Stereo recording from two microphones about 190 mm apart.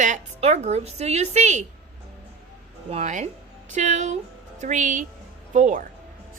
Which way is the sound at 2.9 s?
35° right (ahead or behind).